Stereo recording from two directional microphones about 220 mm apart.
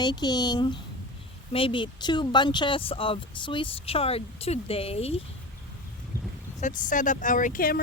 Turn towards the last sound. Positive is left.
turn(degrees=40)  # may be behind; listen again after turning